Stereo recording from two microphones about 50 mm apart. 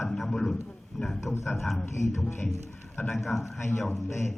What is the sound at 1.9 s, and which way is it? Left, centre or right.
Speech, left.